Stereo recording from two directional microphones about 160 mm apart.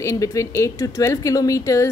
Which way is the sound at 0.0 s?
20° left (ahead or behind).